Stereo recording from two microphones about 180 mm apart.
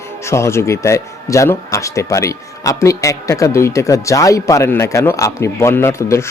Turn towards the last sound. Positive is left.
turn(degrees=15)  # may be behind; listen again after turning